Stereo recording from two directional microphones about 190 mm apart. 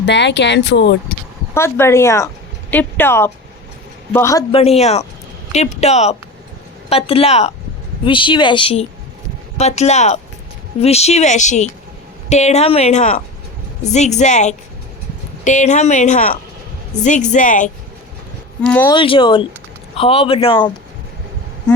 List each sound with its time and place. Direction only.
0.0 s speech: 65° left (ahead or behind)
1.5 s a woman's voice: 15° left (ahead or behind)
4.5 s speech: 30° left (ahead or behind)
18.6 s a woman's voice: 5° left (ahead or behind)
18.9 s speech: 25° left (ahead or behind)